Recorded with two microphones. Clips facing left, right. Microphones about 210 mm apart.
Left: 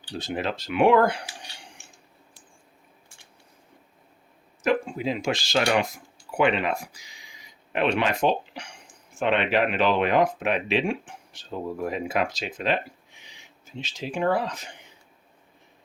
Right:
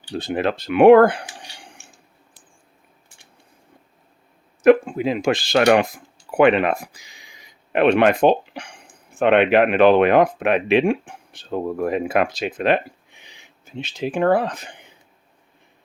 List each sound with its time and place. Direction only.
0.2 s speech: 60° right (ahead or behind)
4.6 s speech: 60° right (ahead or behind)